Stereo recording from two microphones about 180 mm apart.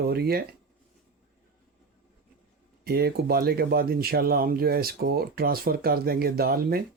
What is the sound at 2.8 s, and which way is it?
Speech, 60° right (ahead or behind).